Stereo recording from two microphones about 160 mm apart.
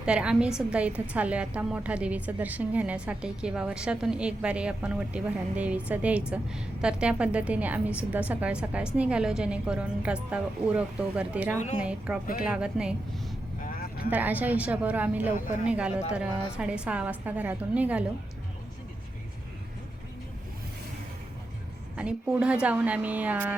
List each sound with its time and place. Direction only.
0.0 s a woman's voice: 5° right (ahead or behind)
13.6 s vehicle: 65° left (ahead or behind)
14.1 s a woman's voice: 10° right (ahead or behind)
21.9 s a woman's voice: 5° right (ahead or behind)